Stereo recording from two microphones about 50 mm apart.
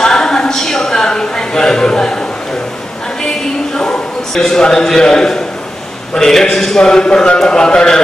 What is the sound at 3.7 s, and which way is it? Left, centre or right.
A man's voice, centre.